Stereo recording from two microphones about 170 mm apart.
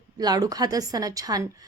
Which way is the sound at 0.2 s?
20° right (ahead or behind).